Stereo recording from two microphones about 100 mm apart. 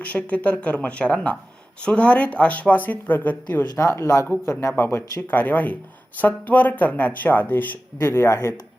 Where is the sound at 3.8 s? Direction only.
30° left (ahead or behind).